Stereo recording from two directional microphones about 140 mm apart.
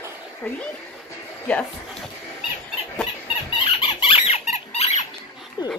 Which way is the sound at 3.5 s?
40° left (ahead or behind).